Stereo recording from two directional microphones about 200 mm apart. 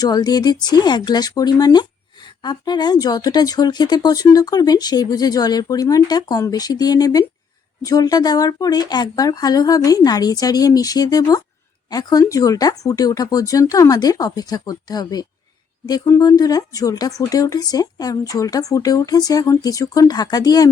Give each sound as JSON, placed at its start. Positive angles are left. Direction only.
{"t": 0.0, "sound": "speech", "side_deg": 20}